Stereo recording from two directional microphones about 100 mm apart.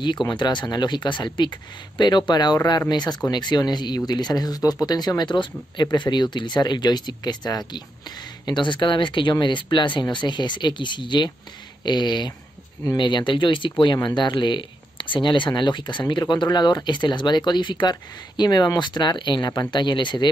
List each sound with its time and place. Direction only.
0.0 s speech: 50° left (ahead or behind)